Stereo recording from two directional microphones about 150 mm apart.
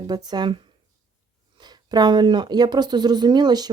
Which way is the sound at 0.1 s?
25° right (ahead or behind).